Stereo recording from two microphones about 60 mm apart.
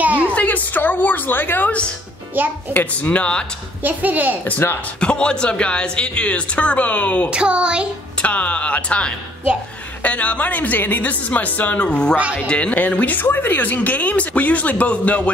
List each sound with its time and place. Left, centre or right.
0.0 s a sound: right
0.3 s a woman's voice: left
2.4 s a child's voice: right
2.7 s speech: left
3.8 s a child's voice: right
5.0 s speech: centre
7.2 s a child's voice: centre
8.2 s speech: left